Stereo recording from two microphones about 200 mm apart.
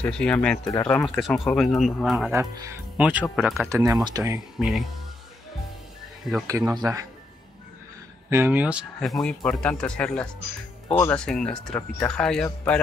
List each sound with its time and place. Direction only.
0.0 s speech: 5° left (ahead or behind)
2.3 s speech: 15° right (ahead or behind)
3.8 s speech: 15° right (ahead or behind)
6.4 s speech: 15° right (ahead or behind)
8.3 s speech: 10° right (ahead or behind); by 12.8 s 5° left (ahead or behind)